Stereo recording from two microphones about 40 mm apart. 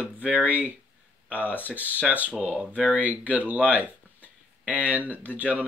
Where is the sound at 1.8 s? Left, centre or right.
Right.